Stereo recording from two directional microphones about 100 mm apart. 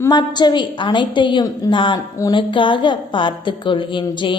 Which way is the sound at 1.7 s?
55° left (ahead or behind).